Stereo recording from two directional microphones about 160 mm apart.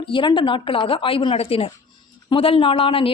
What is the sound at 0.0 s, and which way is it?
Speech, 30° left (ahead or behind).